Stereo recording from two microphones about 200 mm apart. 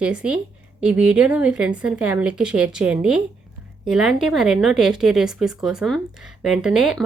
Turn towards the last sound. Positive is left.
turn(degrees=-5)  # may be behind; listen again after turning